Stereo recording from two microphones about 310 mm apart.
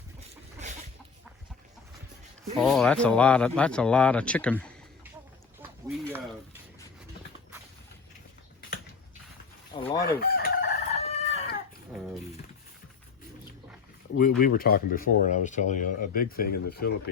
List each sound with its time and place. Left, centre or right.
2.4 s speech: centre
6.1 s a sound: centre
10.0 s chicken: left
14.2 s speech: left